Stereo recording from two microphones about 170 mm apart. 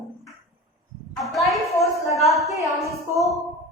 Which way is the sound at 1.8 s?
20° left (ahead or behind).